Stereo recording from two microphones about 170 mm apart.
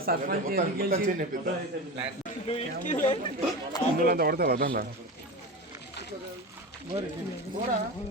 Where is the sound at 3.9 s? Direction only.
60° right (ahead or behind).